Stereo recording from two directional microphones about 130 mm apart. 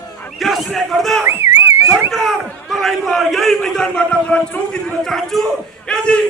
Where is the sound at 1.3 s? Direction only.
20° right (ahead or behind).